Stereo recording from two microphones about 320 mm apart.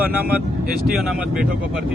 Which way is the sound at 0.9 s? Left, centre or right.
Centre.